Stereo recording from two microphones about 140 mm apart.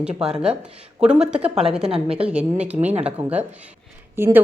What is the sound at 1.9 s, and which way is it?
Speech, 40° right (ahead or behind).